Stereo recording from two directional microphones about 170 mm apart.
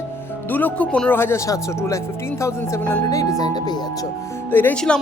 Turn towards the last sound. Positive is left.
turn(degrees=5)  # may be behind; listen again after turning